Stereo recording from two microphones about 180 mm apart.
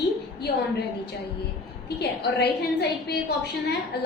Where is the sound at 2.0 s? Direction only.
65° left (ahead or behind).